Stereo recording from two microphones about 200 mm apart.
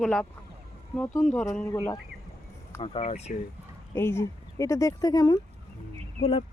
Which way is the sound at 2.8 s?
30° left (ahead or behind).